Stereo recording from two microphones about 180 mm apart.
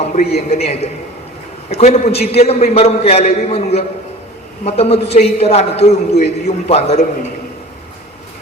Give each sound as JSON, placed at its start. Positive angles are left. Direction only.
{"t": 0.0, "sound": "a man's voice", "side_deg": 40}